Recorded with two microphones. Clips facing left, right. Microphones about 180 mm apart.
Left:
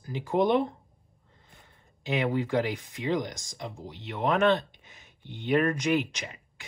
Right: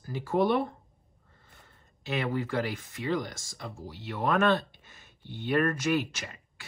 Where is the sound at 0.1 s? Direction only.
15° left (ahead or behind).